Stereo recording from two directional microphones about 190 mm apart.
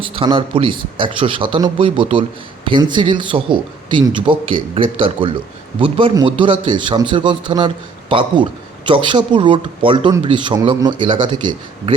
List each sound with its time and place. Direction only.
0.0 s speech: 30° right (ahead or behind)